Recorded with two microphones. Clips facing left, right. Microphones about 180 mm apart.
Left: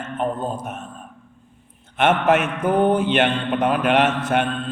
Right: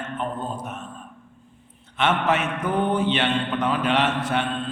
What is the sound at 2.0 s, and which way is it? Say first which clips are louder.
A man's voice: left 5 dB; 50° left (ahead or behind).